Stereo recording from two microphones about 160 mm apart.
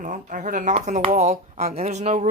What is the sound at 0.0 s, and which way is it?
Speech, 50° right (ahead or behind).